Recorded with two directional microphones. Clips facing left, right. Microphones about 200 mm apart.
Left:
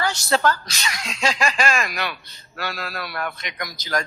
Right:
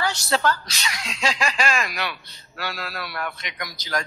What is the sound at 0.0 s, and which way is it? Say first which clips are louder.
Speech: left 2 dB; 45° left (ahead or behind).